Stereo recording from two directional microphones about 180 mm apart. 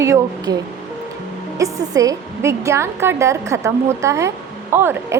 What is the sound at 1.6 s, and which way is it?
A woman's voice, 20° right (ahead or behind).